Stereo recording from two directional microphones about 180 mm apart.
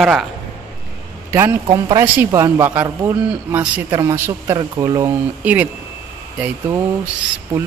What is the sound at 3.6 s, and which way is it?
Speech, 25° right (ahead or behind).